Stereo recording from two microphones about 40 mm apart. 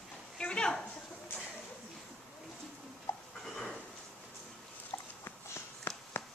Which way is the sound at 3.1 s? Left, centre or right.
Left.